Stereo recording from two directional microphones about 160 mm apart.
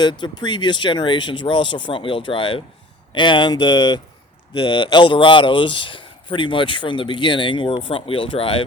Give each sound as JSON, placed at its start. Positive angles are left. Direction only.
{"t": 0.0, "sound": "speech", "side_deg": 30}